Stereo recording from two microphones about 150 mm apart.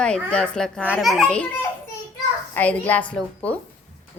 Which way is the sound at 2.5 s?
10° left (ahead or behind).